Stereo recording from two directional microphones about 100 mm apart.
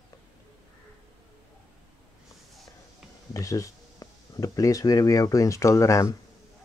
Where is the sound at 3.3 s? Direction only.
35° left (ahead or behind).